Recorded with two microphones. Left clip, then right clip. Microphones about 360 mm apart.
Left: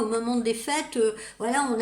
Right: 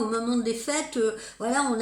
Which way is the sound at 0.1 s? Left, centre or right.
Left.